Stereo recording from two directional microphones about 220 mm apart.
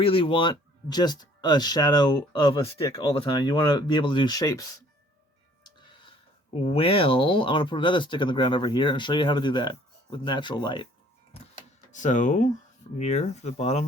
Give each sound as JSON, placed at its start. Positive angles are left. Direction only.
{"t": 0.0, "sound": "speech", "side_deg": 25}
{"t": 6.7, "sound": "speech", "side_deg": 25}
{"t": 11.9, "sound": "speech", "side_deg": 35}